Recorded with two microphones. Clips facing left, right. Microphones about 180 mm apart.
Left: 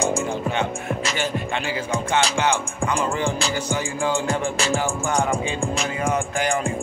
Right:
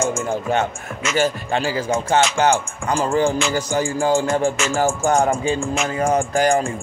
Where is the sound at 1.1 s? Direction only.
40° right (ahead or behind).